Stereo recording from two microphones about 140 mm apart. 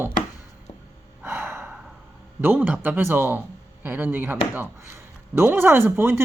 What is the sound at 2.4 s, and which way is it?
Speech, 15° right (ahead or behind).